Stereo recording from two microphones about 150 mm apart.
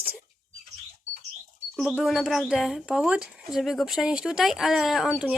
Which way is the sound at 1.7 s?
5° right (ahead or behind).